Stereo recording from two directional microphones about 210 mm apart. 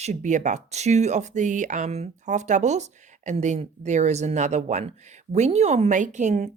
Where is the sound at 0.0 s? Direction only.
35° right (ahead or behind).